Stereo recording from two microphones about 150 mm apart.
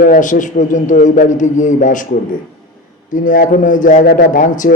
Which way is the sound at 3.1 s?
65° left (ahead or behind).